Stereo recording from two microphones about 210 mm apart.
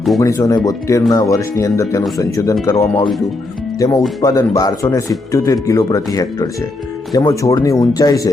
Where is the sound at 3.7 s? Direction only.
15° left (ahead or behind).